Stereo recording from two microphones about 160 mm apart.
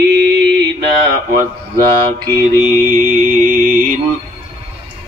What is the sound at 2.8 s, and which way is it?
Mantra, 60° right (ahead or behind).